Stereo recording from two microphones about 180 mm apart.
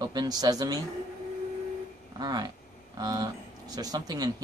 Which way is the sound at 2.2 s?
20° right (ahead or behind).